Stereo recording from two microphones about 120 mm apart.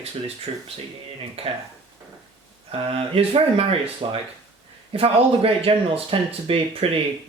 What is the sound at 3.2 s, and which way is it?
Speech, 55° right (ahead or behind).